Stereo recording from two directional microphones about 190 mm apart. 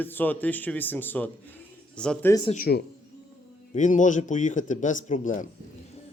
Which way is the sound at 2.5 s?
50° left (ahead or behind).